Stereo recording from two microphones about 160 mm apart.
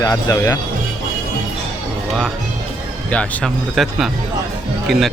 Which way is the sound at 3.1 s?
10° left (ahead or behind).